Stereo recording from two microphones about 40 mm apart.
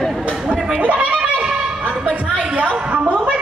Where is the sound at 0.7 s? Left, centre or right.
Right.